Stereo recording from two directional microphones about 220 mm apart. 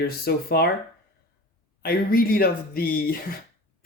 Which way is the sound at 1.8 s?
45° left (ahead or behind).